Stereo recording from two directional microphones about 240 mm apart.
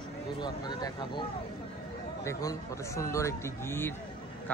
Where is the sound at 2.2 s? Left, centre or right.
Centre.